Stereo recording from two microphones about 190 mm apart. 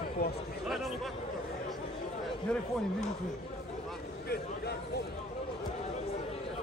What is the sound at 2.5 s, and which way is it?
Speech, 5° left (ahead or behind).